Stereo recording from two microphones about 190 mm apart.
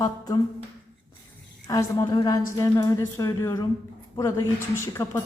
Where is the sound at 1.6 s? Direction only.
20° left (ahead or behind).